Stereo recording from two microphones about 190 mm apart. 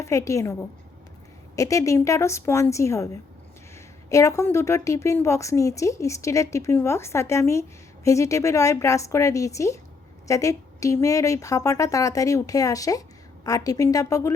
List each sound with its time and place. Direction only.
0.0 s a woman's voice: 15° left (ahead or behind)
1.5 s a woman's voice: 15° left (ahead or behind)
4.1 s a woman's voice: 15° left (ahead or behind)